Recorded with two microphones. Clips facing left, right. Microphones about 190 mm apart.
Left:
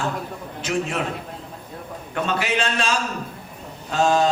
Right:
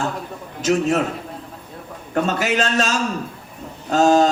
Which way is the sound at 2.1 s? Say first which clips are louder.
Right 4 dB; 40° right (ahead or behind).